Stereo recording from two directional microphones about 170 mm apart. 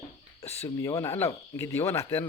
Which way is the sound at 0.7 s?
15° left (ahead or behind).